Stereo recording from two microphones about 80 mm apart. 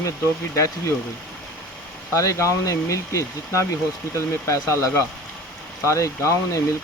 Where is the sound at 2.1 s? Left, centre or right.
Left.